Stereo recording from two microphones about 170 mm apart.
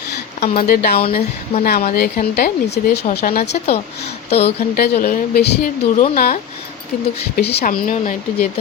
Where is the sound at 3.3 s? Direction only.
60° left (ahead or behind).